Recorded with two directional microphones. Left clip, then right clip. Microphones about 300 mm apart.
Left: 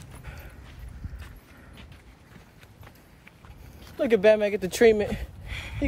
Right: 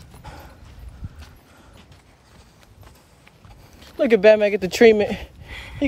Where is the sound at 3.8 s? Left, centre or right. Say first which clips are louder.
Right 6 dB; right.